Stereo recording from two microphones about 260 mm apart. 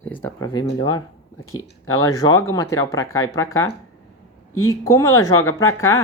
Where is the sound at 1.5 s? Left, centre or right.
Left.